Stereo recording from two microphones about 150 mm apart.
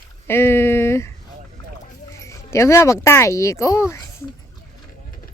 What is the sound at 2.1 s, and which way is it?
Speech, 20° left (ahead or behind).